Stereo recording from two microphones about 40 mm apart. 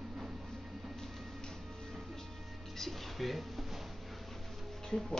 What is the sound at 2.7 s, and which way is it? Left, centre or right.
Music, centre.